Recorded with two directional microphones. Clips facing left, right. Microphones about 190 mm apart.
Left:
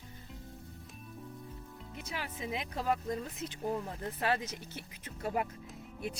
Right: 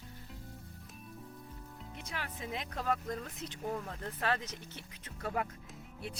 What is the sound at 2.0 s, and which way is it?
Speech, 5° left (ahead or behind).